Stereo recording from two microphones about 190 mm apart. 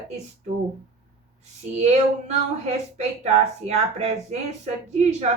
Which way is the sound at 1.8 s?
35° right (ahead or behind).